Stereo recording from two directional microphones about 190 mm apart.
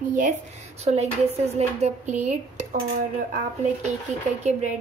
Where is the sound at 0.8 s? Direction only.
35° right (ahead or behind).